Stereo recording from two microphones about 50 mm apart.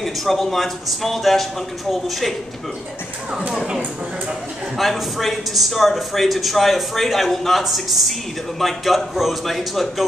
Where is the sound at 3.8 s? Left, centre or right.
Right.